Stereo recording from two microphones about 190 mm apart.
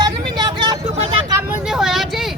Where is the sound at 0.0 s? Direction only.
20° right (ahead or behind).